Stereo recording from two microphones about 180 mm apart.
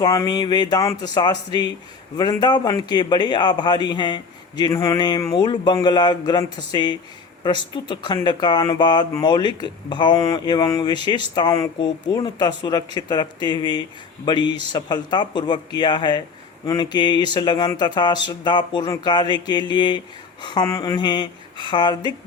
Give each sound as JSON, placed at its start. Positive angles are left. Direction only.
{"t": 0.0, "sound": "speech", "side_deg": 20}